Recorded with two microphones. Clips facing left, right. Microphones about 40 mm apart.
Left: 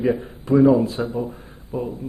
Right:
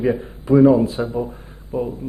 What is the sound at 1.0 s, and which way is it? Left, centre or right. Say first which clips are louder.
Speech: right 2 dB; right.